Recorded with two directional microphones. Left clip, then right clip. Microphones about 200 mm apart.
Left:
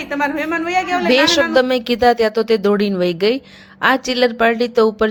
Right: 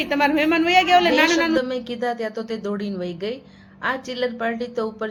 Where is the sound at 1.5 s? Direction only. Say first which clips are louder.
Left 8 dB; 45° left (ahead or behind).